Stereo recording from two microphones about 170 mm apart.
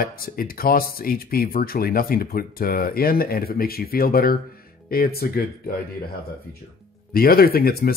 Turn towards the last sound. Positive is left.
turn(degrees=60)  # may be behind; listen again after turning